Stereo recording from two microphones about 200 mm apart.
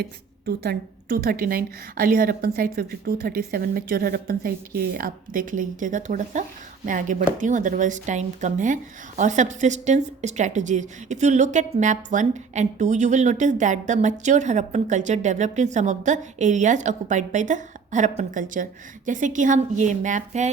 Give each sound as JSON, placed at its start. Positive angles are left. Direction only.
{"t": 0.0, "sound": "a woman's voice", "side_deg": -55}